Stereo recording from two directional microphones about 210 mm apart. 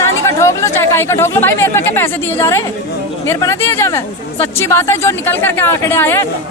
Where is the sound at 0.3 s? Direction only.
15° left (ahead or behind).